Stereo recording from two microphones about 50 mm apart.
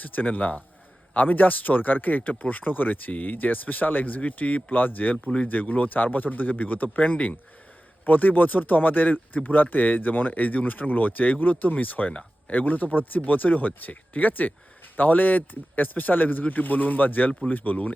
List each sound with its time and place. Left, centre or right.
0.0 s speech: left